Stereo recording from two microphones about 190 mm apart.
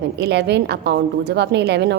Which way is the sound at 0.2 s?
60° right (ahead or behind).